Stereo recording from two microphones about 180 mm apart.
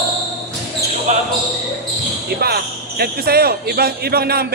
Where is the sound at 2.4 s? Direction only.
60° right (ahead or behind).